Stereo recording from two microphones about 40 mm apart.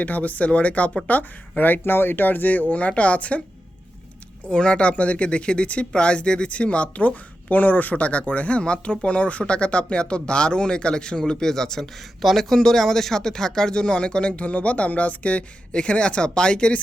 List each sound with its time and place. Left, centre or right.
0.0 s speech: left
1.0 s speech: left
1.8 s speech: left
4.4 s speech: left